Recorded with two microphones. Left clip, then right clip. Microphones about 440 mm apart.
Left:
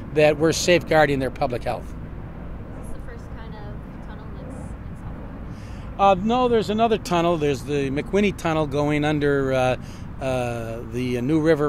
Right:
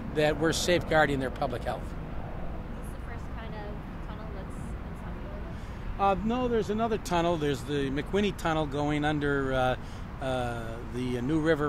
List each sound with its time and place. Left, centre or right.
0.1 s speech: left
5.9 s speech: left